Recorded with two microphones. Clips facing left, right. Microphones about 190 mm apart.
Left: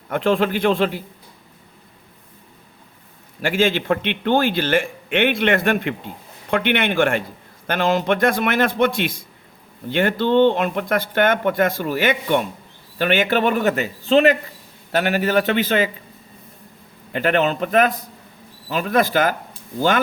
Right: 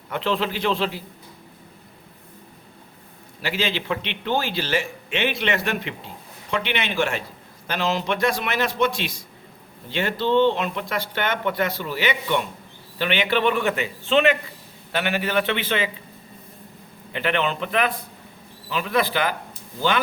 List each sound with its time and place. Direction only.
0.1 s speech: 50° left (ahead or behind)
3.4 s speech: 50° left (ahead or behind)
17.1 s speech: 45° left (ahead or behind)